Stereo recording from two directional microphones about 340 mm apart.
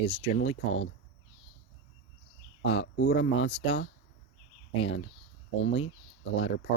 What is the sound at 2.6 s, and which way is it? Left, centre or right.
Speech, left.